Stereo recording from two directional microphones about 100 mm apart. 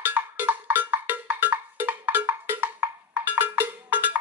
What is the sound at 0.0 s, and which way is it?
Cowbell, 20° right (ahead or behind).